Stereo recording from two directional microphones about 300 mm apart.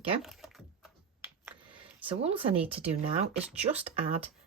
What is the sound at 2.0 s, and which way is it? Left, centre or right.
Speech, centre.